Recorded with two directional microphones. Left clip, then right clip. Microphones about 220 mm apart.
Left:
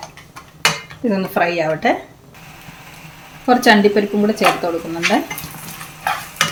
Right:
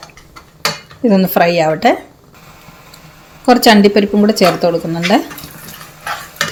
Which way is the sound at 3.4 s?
40° right (ahead or behind).